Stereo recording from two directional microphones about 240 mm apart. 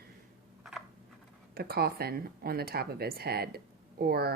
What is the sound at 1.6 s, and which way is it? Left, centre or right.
Speech, right.